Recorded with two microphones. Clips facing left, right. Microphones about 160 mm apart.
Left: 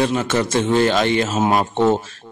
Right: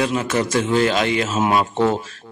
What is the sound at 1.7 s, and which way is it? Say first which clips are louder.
Speech: left 2 dB; 25° left (ahead or behind).